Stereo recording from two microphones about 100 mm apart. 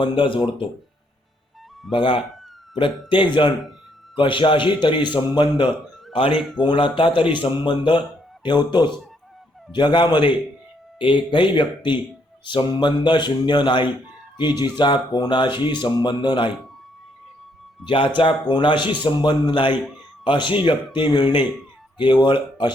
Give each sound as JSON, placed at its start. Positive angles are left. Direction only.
{"t": 0.0, "sound": "a man's voice", "side_deg": 55}
{"t": 1.9, "sound": "a man's voice", "side_deg": 60}
{"t": 6.1, "sound": "a man's voice", "side_deg": 65}
{"t": 17.8, "sound": "a man's voice", "side_deg": 60}